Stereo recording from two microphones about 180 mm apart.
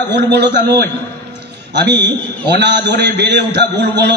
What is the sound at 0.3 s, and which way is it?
A man's voice, 70° right (ahead or behind).